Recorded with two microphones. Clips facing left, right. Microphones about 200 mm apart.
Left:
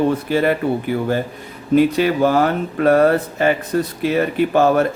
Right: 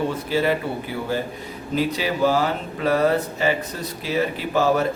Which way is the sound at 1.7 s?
55° left (ahead or behind).